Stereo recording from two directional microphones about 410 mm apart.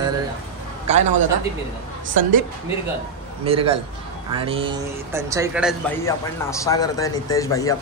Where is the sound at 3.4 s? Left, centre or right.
Centre.